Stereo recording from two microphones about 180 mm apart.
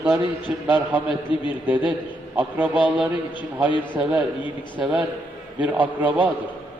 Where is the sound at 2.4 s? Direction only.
10° right (ahead or behind).